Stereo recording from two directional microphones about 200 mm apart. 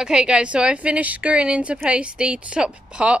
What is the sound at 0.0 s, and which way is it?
A woman's voice, 5° right (ahead or behind).